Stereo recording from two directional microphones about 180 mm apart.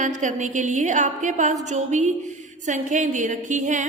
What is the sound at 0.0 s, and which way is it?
A woman's voice, 45° right (ahead or behind).